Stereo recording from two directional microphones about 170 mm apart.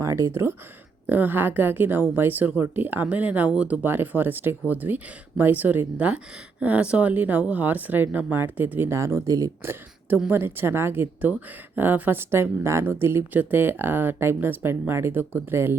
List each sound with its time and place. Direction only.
0.0 s a woman's voice: 20° right (ahead or behind)